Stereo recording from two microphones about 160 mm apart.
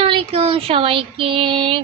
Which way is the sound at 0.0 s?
35° right (ahead or behind).